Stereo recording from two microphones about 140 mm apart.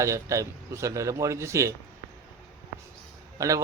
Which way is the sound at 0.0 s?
20° right (ahead or behind).